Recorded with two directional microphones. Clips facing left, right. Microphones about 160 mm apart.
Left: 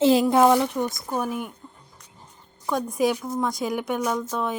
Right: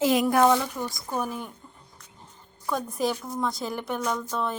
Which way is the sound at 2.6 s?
15° left (ahead or behind).